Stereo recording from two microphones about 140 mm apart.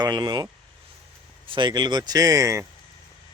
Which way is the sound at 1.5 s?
35° right (ahead or behind).